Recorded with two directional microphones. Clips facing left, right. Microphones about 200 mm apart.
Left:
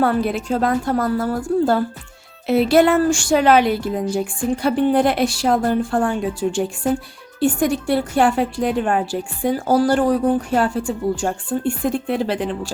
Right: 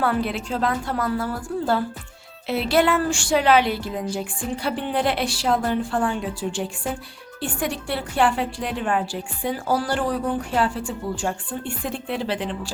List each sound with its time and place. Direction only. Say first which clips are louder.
0.0 s a woman's voice: left 5 dB; 45° left (ahead or behind)